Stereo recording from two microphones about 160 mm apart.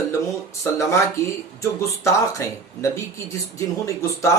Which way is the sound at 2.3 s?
15° left (ahead or behind).